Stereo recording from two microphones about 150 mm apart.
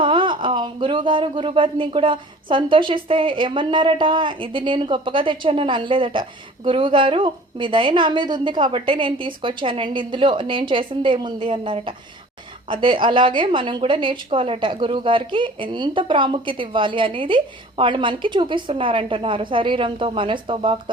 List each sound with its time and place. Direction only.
0.0 s a woman's voice: 35° right (ahead or behind)